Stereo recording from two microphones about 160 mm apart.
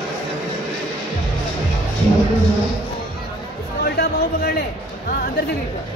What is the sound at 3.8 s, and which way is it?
Speech, 75° left (ahead or behind).